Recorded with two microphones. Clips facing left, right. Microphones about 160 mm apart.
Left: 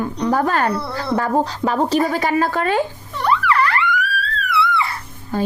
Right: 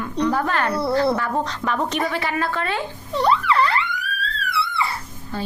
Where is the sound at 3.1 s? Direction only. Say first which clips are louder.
Even; 25° right (ahead or behind).